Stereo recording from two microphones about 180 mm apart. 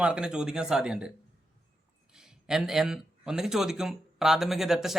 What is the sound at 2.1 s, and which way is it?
A man's voice, 5° right (ahead or behind).